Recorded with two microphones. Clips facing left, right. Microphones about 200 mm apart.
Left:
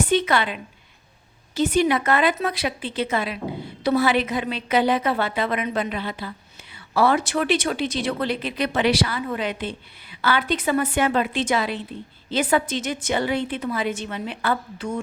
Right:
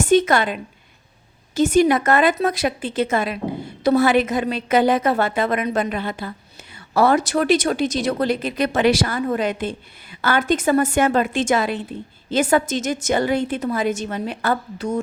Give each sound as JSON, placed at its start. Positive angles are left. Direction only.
{"t": 0.0, "sound": "a woman's voice", "side_deg": -45}